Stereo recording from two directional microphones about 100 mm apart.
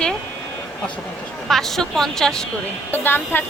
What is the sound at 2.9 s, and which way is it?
Speech, 20° left (ahead or behind).